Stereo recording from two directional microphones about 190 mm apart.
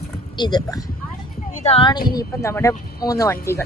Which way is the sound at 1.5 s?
35° left (ahead or behind).